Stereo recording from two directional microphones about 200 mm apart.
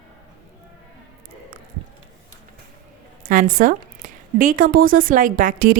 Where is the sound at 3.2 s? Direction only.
40° right (ahead or behind).